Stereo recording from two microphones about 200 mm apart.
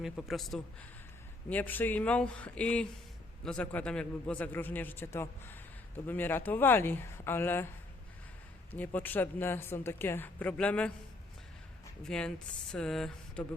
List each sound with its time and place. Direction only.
0.0 s speech: centre (ahead or behind)
8.7 s speech: 10° left (ahead or behind)
12.0 s speech: 5° left (ahead or behind)